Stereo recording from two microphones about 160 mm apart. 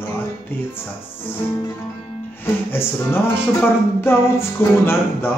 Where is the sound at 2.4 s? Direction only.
15° left (ahead or behind).